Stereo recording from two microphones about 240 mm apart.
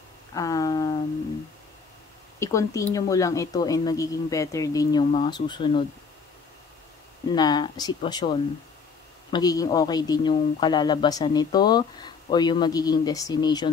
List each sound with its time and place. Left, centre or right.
0.3 s a sound: centre
2.4 s speech: centre
7.3 s speech: centre